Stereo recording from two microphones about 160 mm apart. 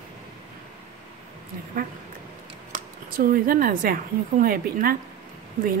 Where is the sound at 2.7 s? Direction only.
60° right (ahead or behind).